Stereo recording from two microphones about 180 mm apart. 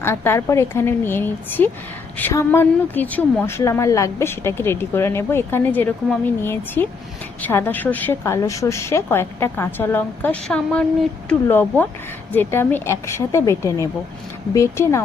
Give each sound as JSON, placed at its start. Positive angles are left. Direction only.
{"t": 0.0, "sound": "speech", "side_deg": 15}